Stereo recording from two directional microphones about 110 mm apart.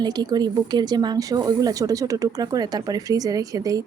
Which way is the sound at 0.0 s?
40° right (ahead or behind).